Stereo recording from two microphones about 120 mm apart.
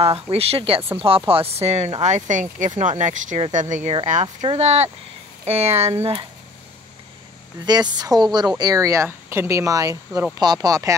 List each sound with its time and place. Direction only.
0.0 s speech: 55° right (ahead or behind); by 4.3 s 80° right
4.6 s speech: 65° right (ahead or behind)
7.6 s speech: 35° right (ahead or behind)